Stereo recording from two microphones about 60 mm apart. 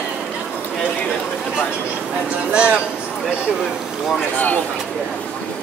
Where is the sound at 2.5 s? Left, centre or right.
Right.